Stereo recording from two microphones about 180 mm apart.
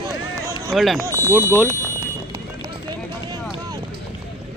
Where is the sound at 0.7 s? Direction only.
Centre (ahead or behind).